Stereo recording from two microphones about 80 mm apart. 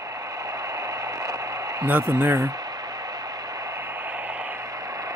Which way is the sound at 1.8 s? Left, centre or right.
Right.